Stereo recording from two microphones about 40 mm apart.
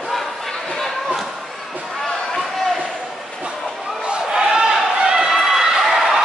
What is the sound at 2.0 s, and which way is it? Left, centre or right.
Chop, centre.